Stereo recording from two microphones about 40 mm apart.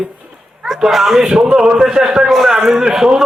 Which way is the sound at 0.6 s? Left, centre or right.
Centre.